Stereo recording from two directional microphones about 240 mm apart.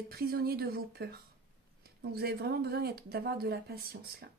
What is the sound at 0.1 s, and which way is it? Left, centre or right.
Speech, right.